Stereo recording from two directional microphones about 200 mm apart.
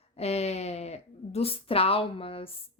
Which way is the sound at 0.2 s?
30° left (ahead or behind).